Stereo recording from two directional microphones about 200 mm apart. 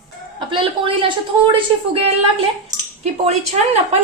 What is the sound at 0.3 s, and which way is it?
A woman's voice, 25° right (ahead or behind).